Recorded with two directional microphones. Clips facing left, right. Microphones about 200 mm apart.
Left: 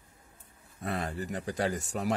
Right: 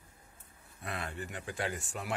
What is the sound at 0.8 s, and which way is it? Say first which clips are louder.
Speech: left 6 dB; 40° left (ahead or behind).